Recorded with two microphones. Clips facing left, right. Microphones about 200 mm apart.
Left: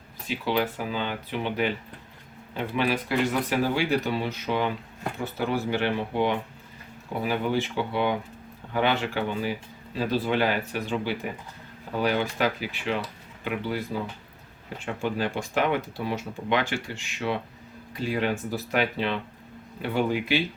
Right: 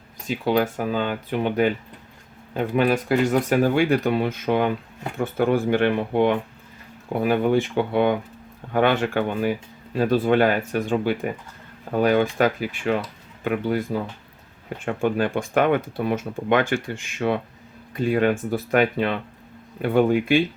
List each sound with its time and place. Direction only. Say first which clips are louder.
0.3 s speech: right 5 dB; 45° right (ahead or behind)
2.7 s speech: right 6 dB; 50° right (ahead or behind)